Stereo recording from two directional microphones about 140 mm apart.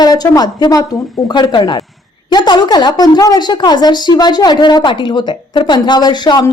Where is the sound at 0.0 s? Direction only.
30° left (ahead or behind).